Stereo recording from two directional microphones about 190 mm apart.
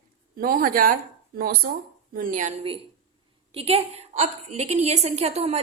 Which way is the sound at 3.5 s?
30° right (ahead or behind).